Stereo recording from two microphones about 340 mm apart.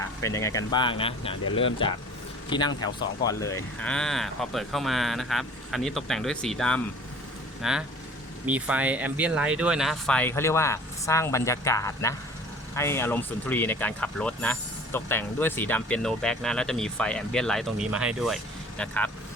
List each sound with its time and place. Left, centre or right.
0.0 s speech: centre